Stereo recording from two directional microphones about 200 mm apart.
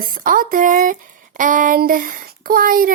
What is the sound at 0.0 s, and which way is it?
A woman's voice, 45° right (ahead or behind).